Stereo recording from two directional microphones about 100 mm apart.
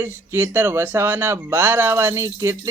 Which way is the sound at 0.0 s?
20° right (ahead or behind).